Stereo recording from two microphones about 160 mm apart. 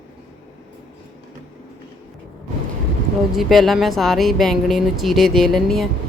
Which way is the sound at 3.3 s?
Centre (ahead or behind).